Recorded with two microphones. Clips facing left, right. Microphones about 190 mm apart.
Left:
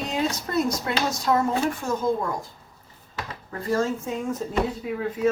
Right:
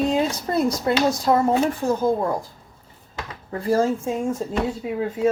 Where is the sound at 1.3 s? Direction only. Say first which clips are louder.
Right 2 dB; 30° right (ahead or behind).